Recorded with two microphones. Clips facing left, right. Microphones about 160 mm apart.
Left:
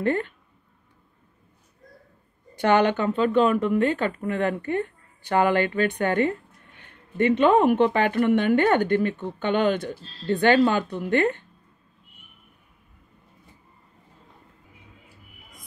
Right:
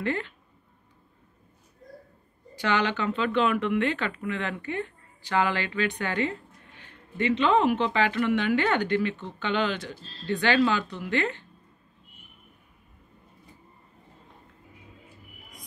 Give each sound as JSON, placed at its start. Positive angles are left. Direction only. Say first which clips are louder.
{"t": 0.0, "sound": "a woman's voice", "louder": "left 5 dB", "side_deg": 50}
{"t": 2.5, "sound": "a woman's voice", "louder": "left 7 dB", "side_deg": 50}